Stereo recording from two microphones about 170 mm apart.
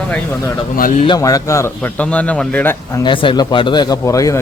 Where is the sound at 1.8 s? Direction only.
5° left (ahead or behind).